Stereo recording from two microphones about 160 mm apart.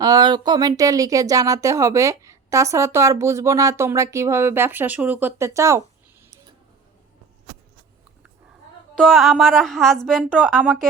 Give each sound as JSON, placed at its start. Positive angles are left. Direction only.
{"t": 0.0, "sound": "speech", "side_deg": -25}
{"t": 9.0, "sound": "music", "side_deg": 0}